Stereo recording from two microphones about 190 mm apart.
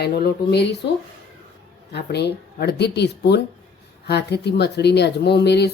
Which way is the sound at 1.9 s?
60° left (ahead or behind).